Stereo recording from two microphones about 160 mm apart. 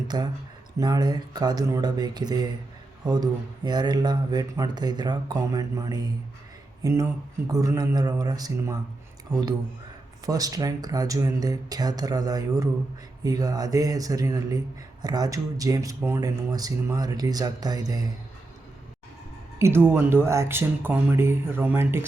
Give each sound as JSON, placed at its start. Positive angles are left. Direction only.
{"t": 0.1, "sound": "speech", "side_deg": -25}
{"t": 10.2, "sound": "speech", "side_deg": -20}
{"t": 19.5, "sound": "speech", "side_deg": -15}